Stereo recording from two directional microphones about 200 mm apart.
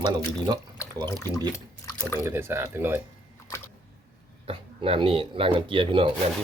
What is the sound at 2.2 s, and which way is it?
Speech, 10° right (ahead or behind).